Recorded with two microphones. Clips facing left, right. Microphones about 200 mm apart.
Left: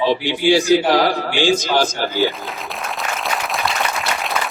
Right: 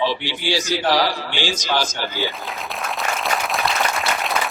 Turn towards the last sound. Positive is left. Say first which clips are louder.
# even
turn(degrees=0)  # may be behind; listen again after turning